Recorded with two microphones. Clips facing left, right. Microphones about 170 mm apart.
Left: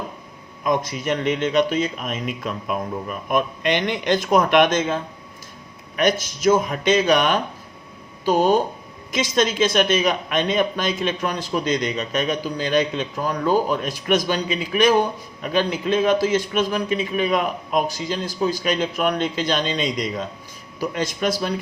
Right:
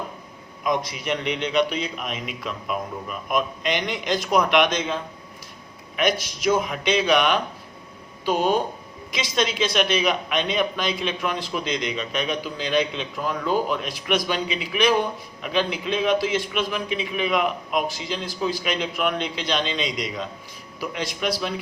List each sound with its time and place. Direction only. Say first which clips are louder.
0.6 s speech: left 3 dB; 50° left (ahead or behind)
6.0 s speech: left 3 dB; 45° left (ahead or behind)